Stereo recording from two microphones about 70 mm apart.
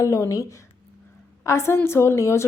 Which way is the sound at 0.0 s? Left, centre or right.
Left.